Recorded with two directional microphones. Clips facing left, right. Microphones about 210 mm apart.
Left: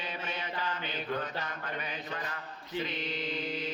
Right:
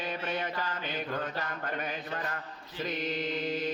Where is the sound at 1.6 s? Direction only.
45° right (ahead or behind).